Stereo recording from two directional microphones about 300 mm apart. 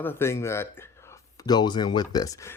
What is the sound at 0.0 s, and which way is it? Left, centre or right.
Speech, centre.